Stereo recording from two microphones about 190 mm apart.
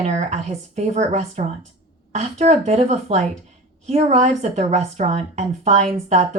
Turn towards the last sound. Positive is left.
turn(degrees=-35)  # may be behind; listen again after turning